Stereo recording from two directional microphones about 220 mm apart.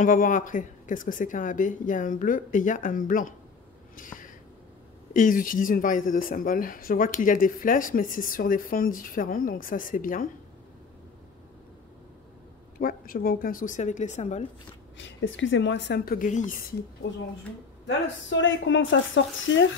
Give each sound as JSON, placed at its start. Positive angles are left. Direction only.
{"t": 0.0, "sound": "speech", "side_deg": 35}
{"t": 3.9, "sound": "a sound", "side_deg": 35}
{"t": 5.1, "sound": "speech", "side_deg": 40}
{"t": 12.7, "sound": "speech", "side_deg": 40}
{"t": 15.0, "sound": "a woman's voice", "side_deg": 60}
{"t": 17.8, "sound": "speech", "side_deg": 60}